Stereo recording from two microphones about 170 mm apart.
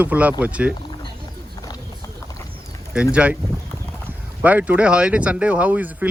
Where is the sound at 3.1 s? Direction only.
5° right (ahead or behind).